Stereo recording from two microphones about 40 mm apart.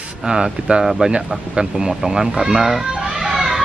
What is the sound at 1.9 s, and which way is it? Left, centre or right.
Speech, centre.